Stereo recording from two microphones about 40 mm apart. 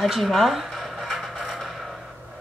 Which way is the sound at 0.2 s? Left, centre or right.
Centre.